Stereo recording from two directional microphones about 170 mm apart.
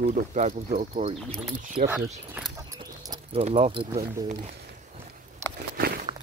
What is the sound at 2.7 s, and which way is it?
Keys jangling, 20° right (ahead or behind).